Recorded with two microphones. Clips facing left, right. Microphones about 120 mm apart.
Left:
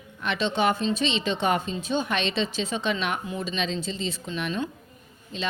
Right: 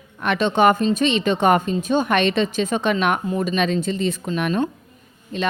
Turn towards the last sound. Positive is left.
turn(degrees=-55)  # may be behind; listen again after turning